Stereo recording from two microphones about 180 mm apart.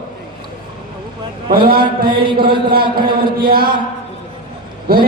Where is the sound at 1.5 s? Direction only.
55° right (ahead or behind).